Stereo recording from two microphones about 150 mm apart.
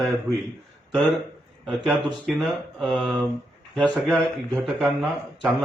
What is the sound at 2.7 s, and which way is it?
Speech, centre (ahead or behind).